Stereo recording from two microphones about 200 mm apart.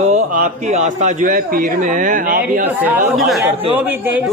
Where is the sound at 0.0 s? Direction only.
40° right (ahead or behind).